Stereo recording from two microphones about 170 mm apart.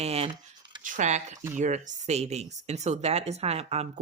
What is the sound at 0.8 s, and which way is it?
Speech, 45° right (ahead or behind).